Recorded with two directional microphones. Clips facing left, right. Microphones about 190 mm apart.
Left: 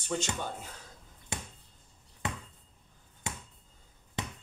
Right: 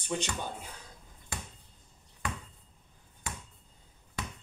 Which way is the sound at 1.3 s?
20° left (ahead or behind).